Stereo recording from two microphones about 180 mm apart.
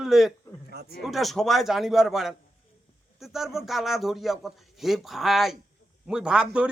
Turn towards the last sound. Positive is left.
turn(degrees=-5)  # may be behind; listen again after turning